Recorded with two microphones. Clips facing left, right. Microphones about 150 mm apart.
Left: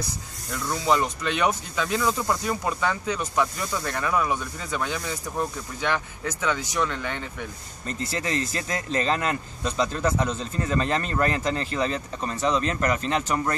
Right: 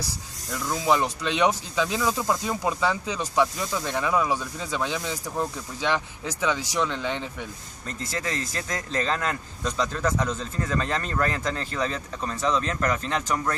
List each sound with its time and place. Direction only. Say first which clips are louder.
0.7 s speech: even; 15° right (ahead or behind)
7.8 s speech: left 2 dB; centre (ahead or behind)